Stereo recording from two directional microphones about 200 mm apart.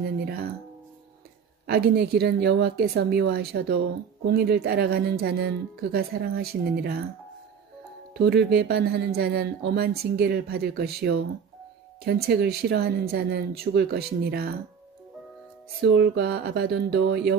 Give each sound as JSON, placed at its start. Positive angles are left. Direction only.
{"t": 0.0, "sound": "speech", "side_deg": -50}
{"t": 1.7, "sound": "speech", "side_deg": -50}
{"t": 8.1, "sound": "speech", "side_deg": -55}
{"t": 15.8, "sound": "speech", "side_deg": -55}